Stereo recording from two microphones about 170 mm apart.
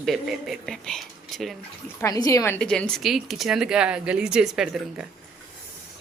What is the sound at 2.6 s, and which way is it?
Speech, 5° left (ahead or behind).